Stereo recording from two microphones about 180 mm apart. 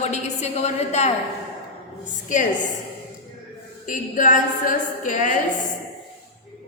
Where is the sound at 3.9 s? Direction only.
45° left (ahead or behind).